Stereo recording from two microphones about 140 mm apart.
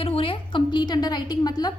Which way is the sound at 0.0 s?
40° left (ahead or behind).